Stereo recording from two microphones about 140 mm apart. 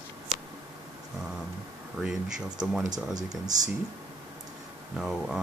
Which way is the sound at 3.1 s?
25° right (ahead or behind).